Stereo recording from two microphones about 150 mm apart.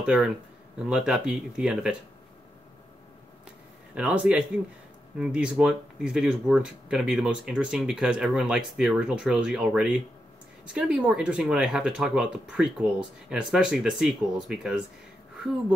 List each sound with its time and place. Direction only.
0.0 s speech: 5° right (ahead or behind)
3.9 s a man's voice: 10° right (ahead or behind)